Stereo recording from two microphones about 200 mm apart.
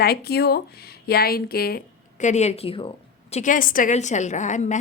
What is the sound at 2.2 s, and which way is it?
Speech, 35° left (ahead or behind).